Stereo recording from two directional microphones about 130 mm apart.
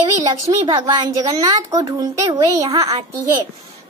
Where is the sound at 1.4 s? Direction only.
25° right (ahead or behind).